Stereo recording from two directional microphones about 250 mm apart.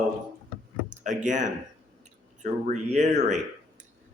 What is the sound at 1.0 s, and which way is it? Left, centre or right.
A man's voice, right.